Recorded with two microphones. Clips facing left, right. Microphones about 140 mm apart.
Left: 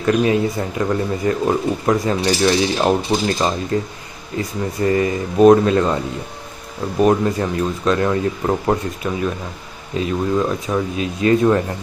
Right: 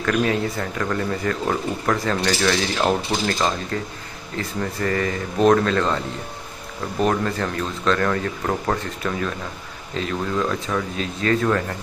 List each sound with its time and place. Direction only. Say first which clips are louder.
0.0 s speech: left 5 dB; 20° left (ahead or behind)
7.0 s speech: left 6 dB; 20° left (ahead or behind)